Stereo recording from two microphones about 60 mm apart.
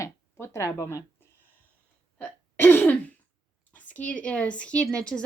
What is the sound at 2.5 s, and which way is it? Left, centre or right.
Throat clearing, left.